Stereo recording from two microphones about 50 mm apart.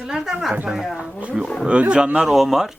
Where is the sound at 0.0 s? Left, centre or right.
Centre.